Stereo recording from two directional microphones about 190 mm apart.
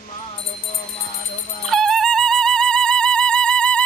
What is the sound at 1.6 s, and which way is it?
Music, centre (ahead or behind).